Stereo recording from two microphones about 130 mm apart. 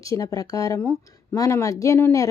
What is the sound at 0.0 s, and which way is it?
Speech, 25° left (ahead or behind).